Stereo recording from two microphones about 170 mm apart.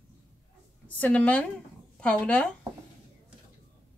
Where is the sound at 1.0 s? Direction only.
10° left (ahead or behind).